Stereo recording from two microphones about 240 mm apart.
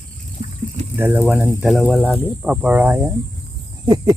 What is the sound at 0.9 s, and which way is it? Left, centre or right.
Speech, centre.